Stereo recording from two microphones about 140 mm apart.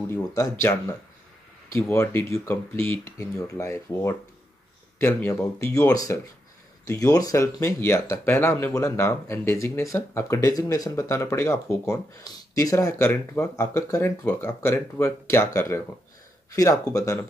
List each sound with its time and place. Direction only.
0.1 s speech: 20° left (ahead or behind)
1.7 s speech: 20° left (ahead or behind)